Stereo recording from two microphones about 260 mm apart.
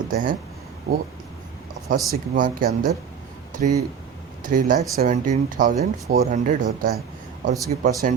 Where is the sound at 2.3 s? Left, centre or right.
Right.